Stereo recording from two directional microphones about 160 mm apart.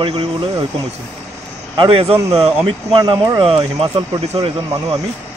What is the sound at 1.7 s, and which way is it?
Speech, 35° right (ahead or behind).